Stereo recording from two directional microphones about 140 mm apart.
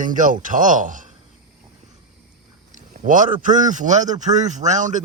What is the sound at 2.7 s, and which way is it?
Speech, 65° right (ahead or behind).